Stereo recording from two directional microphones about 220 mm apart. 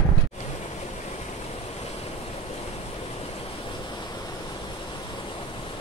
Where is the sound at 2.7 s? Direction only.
30° left (ahead or behind).